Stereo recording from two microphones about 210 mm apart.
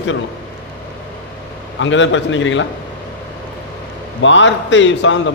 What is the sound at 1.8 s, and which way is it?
Speech, 65° left (ahead or behind).